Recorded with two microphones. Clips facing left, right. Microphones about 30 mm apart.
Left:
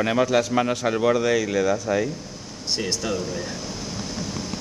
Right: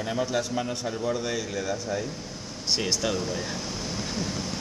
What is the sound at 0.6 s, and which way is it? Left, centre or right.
Speech, left.